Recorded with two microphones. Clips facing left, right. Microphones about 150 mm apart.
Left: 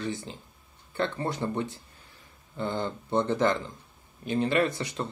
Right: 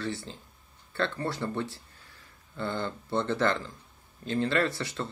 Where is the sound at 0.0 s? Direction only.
15° left (ahead or behind).